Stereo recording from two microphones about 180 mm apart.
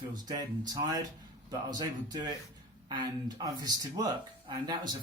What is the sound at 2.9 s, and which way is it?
Speech, 25° right (ahead or behind).